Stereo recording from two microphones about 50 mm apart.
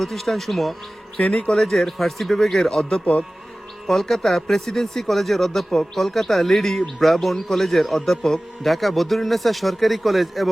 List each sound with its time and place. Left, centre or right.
0.0 s speech: centre
1.2 s speech: left
1.5 s speech: centre